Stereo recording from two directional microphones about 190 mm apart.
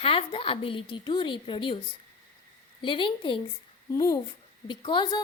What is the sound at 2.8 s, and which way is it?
A woman's voice, 25° left (ahead or behind).